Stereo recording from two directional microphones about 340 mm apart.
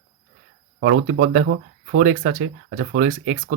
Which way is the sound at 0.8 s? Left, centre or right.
Right.